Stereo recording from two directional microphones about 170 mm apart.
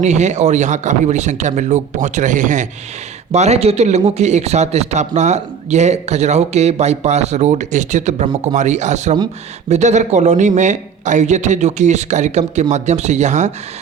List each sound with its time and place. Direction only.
0.0 s a man's voice: 45° right (ahead or behind)